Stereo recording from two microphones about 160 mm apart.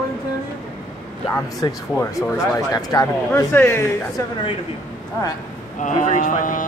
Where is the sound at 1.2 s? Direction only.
20° left (ahead or behind).